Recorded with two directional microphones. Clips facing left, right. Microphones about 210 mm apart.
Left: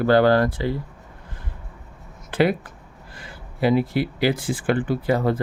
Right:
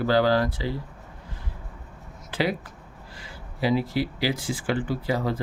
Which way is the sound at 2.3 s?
55° left (ahead or behind).